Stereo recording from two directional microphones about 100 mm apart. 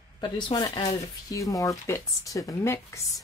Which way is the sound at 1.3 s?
35° left (ahead or behind).